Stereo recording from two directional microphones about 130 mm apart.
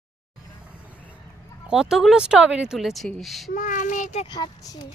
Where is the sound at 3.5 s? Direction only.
80° left; by 4.3 s 65° left (ahead or behind).